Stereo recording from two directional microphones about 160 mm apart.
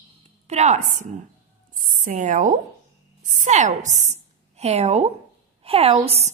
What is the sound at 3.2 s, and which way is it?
A woman's voice, 55° right (ahead or behind).